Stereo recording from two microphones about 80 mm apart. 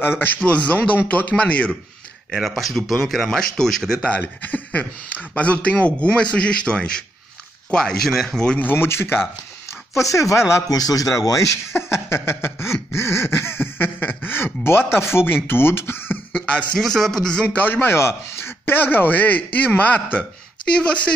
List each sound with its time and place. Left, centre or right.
0.2 s a man's voice: centre
2.3 s speech: centre
4.2 s a man's voice: left
8.5 s a man's voice: left
9.9 s speech: left
12.9 s a sound: left
15.4 s a man's voice: left
16.3 s a man's voice: centre